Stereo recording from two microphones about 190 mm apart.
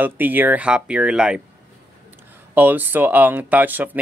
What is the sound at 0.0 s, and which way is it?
Speech, 10° right (ahead or behind).